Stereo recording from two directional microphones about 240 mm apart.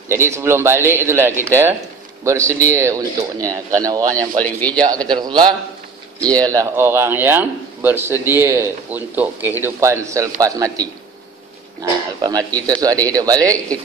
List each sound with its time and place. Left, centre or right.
0.1 s speech: centre
4.4 s speech: centre
5.2 s speech: centre